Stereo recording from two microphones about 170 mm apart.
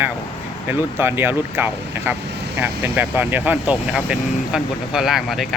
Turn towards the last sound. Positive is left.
turn(degrees=0)  # may be behind; listen again after turning